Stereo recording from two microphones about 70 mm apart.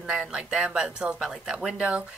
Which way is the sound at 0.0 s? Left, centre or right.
Centre.